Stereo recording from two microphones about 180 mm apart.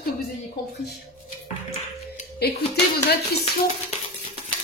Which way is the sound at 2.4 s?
60° left (ahead or behind).